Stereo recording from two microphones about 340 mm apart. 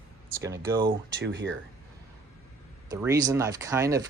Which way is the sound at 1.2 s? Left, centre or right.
Right.